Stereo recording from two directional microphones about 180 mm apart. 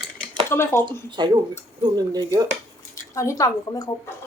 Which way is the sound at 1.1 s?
25° right (ahead or behind).